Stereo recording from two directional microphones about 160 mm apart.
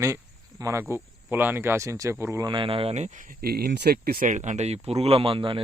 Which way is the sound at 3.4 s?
70° right (ahead or behind).